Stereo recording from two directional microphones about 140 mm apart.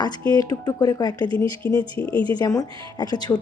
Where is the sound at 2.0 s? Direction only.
15° left (ahead or behind).